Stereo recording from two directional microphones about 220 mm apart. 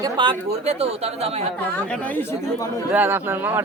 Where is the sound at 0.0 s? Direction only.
20° right (ahead or behind).